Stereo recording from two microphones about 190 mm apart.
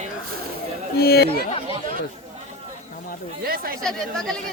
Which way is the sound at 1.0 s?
55° left (ahead or behind).